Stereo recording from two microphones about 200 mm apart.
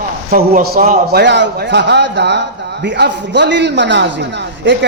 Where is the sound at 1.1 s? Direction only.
60° right (ahead or behind).